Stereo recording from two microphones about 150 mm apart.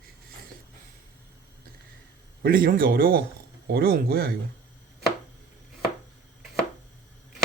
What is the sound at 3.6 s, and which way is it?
Speech, 90° right.